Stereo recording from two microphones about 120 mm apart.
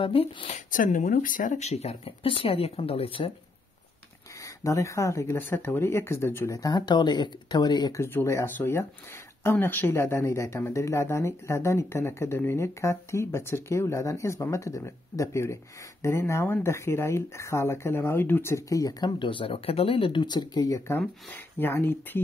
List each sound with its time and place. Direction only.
0.0 s speech: 50° left (ahead or behind)
0.5 s speech: 90° left; by 3.3 s 50° left (ahead or behind)
4.6 s speech: 25° left (ahead or behind)
8.0 s speech: 20° left (ahead or behind)